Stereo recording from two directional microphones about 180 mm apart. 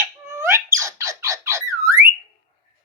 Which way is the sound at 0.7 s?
15° right (ahead or behind).